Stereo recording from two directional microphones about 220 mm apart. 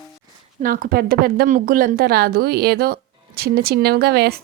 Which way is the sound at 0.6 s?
40° right (ahead or behind).